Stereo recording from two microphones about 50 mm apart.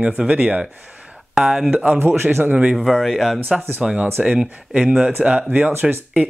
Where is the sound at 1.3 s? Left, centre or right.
Centre.